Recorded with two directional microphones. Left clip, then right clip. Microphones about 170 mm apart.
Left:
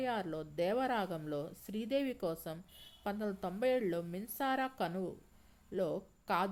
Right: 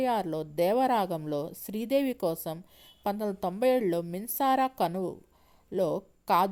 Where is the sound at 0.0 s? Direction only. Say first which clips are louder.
Right 9 dB; 40° right (ahead or behind).